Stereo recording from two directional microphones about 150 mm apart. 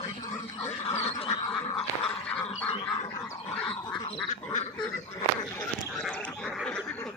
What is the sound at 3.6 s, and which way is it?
Cat, 5° left (ahead or behind).